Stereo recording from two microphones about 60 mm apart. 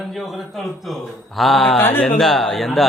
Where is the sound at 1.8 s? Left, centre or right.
Left.